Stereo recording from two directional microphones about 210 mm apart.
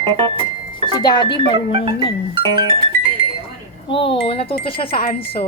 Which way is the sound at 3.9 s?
25° left (ahead or behind).